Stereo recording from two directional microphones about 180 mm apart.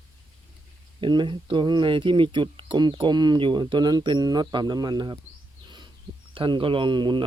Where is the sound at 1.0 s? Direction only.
25° right (ahead or behind).